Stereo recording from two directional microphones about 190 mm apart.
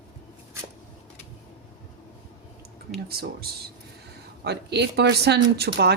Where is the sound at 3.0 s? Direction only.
55° right (ahead or behind).